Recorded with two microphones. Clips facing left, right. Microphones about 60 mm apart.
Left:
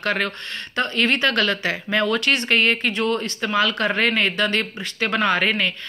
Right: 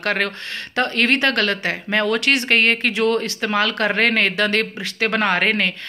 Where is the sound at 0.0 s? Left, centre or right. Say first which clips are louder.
Right 2 dB; right.